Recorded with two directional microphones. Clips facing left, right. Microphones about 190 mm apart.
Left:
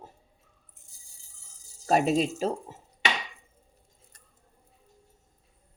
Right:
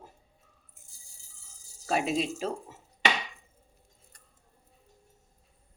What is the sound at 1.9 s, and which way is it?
Speech, 40° left (ahead or behind).